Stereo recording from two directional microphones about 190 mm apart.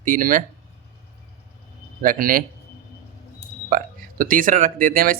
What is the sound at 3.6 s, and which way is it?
Speech, 50° right (ahead or behind).